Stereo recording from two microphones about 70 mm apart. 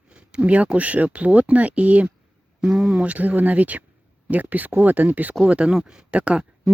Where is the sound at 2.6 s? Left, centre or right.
Centre.